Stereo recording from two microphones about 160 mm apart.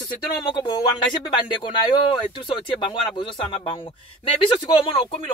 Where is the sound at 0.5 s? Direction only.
30° left (ahead or behind).